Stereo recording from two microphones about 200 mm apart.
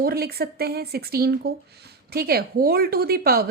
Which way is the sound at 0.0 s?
50° right (ahead or behind).